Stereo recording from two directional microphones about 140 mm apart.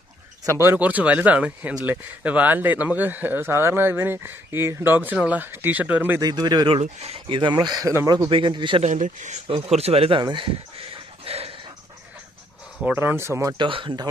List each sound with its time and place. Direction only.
0.5 s a man's voice: 15° right (ahead or behind)
6.1 s speech: 30° right (ahead or behind)
6.7 s speech: 50° right (ahead or behind); by 8.3 s 20° right (ahead or behind)
8.3 s speech: 35° right (ahead or behind)
8.8 s speech: 60° right (ahead or behind)
9.5 s speech: 50° right (ahead or behind)
12.8 s a man's voice: 15° right (ahead or behind)
13.6 s speech: 35° right (ahead or behind)